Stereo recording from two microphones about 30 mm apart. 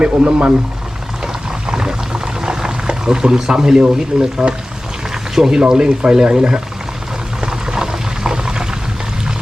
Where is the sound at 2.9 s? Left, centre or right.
Right.